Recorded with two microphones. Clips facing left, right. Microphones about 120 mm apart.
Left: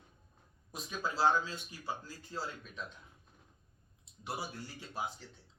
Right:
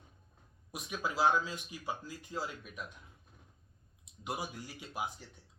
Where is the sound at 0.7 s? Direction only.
15° right (ahead or behind).